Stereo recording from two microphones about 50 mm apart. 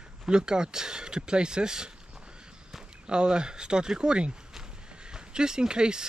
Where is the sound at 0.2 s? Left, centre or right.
Centre.